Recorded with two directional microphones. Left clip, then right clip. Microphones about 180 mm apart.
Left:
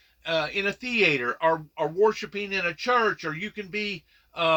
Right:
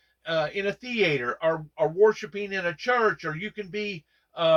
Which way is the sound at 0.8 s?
5° left (ahead or behind).